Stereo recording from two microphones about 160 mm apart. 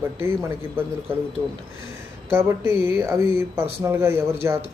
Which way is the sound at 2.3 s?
15° right (ahead or behind).